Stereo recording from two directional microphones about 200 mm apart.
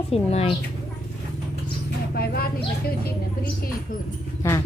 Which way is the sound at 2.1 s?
50° left (ahead or behind).